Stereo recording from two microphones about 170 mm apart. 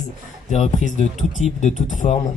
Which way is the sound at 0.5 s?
45° left (ahead or behind).